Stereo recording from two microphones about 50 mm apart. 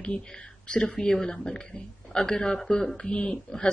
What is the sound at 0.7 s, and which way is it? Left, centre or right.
Speech, centre.